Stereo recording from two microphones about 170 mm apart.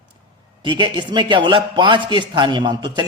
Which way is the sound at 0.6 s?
25° right (ahead or behind).